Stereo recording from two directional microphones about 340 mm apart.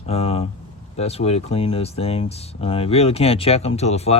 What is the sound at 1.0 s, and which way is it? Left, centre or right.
Speech, centre.